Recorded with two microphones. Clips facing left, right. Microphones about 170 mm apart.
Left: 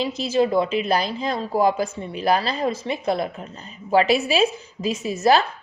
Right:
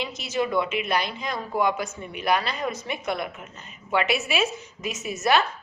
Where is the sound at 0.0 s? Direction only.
30° left (ahead or behind).